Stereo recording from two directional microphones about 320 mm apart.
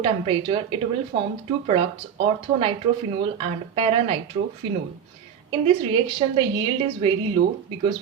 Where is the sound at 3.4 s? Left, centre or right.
Centre.